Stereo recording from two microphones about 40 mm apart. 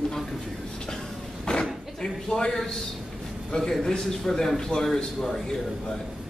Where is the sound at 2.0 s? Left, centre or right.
Centre.